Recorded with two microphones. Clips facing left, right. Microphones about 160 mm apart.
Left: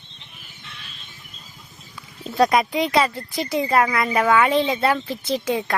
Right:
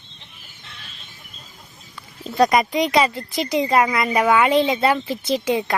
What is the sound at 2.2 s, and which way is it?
Speech, centre (ahead or behind).